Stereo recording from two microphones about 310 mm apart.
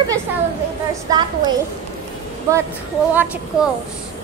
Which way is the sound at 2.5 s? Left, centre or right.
Centre.